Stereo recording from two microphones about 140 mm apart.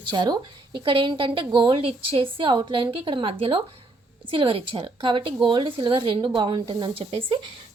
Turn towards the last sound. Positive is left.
turn(degrees=-40)  # may be behind; listen again after turning